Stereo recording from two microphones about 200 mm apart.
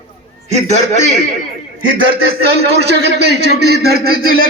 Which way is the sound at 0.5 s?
35° right (ahead or behind).